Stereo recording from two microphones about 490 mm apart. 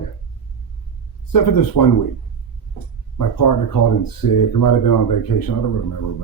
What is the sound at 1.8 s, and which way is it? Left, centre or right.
Speech, left.